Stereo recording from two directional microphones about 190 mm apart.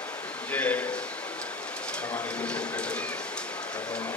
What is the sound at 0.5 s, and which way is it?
Speech, 5° left (ahead or behind).